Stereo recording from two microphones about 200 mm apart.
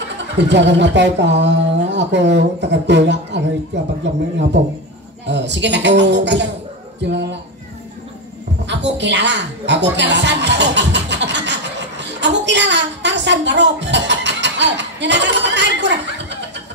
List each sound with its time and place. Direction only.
0.4 s a man's voice: 60° right (ahead or behind)
8.6 s a woman's voice: 60° right (ahead or behind)